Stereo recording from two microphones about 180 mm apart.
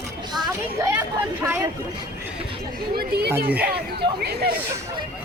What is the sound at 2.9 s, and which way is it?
Speech, 65° right (ahead or behind).